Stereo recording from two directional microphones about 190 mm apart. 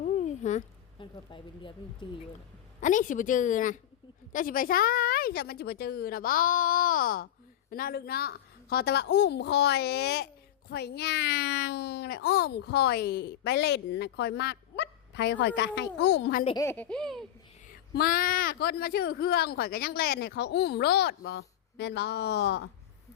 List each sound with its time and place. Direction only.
0.0 s a sound: 40° left (ahead or behind)
0.9 s speech: 25° left (ahead or behind)
2.8 s a woman's voice: 45° left (ahead or behind); by 16.4 s 65° left (ahead or behind)
16.6 s a child's voice: 10° left (ahead or behind)
17.7 s speech: 50° left (ahead or behind)